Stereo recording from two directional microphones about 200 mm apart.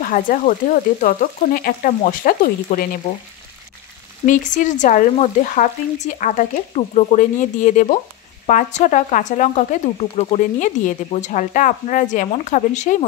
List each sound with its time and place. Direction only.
0.0 s speech: 45° left (ahead or behind)
4.3 s speech: 40° left (ahead or behind)